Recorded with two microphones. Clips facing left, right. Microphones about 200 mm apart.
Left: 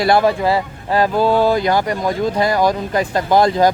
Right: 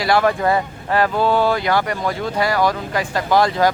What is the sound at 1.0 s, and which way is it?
Speech, 15° left (ahead or behind).